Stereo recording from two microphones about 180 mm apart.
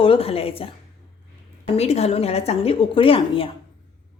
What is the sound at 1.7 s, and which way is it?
A woman's voice, 35° left (ahead or behind).